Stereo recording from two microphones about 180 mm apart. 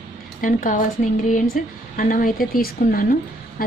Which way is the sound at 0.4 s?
50° left (ahead or behind).